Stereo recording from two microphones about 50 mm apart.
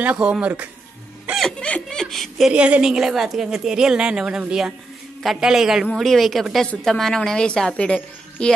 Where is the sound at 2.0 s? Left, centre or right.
Centre.